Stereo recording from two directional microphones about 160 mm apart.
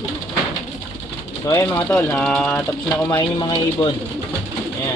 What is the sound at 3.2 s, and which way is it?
Speech, 25° left (ahead or behind).